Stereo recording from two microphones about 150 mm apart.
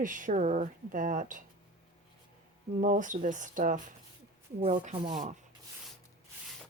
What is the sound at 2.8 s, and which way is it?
Speech, 60° right (ahead or behind).